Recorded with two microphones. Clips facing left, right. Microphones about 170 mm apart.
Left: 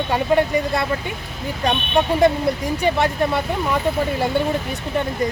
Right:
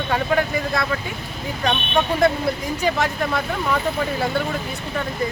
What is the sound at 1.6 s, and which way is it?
Speech, 10° left (ahead or behind).